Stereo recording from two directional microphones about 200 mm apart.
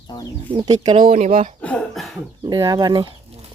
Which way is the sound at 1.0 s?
35° right (ahead or behind).